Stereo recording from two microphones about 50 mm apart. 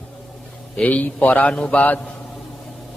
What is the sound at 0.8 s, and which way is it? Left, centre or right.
A man's voice, left.